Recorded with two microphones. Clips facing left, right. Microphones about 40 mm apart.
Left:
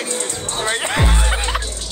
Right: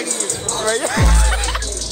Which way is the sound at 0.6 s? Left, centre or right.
Left.